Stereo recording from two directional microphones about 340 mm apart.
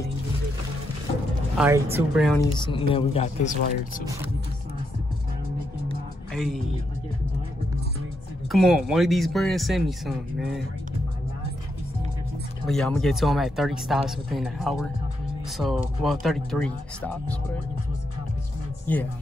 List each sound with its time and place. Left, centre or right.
1.6 s speech: centre
2.3 s a man's voice: centre
6.3 s speech: centre
8.5 s speech: centre
12.6 s speech: centre
18.9 s speech: centre